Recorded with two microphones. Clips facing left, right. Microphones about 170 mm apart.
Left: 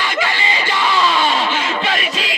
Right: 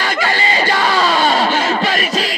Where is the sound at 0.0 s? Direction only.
40° right (ahead or behind).